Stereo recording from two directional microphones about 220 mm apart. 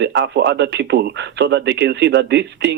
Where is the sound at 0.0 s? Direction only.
50° right (ahead or behind).